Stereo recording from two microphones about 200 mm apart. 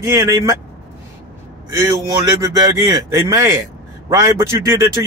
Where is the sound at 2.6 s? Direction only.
15° right (ahead or behind).